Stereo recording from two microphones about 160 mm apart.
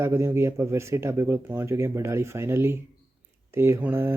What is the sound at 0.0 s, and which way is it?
Speech, 15° right (ahead or behind).